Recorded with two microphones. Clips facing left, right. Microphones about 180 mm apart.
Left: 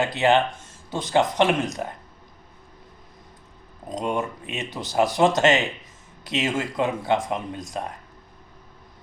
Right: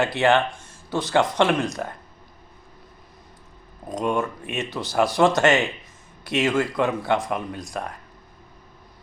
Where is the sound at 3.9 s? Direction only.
20° left (ahead or behind).